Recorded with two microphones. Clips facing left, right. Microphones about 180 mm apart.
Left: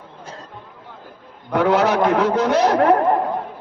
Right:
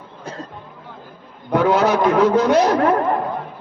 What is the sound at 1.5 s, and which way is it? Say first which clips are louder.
A man's voice: right 1 dB; 70° left (ahead or behind).